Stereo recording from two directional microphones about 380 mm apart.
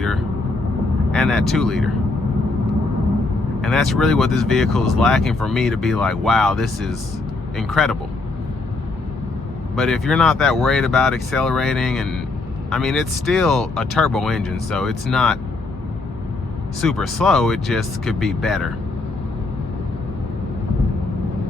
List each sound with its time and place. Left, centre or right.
1.1 s speech: centre
3.6 s speech: centre
9.7 s speech: centre
16.8 s speech: centre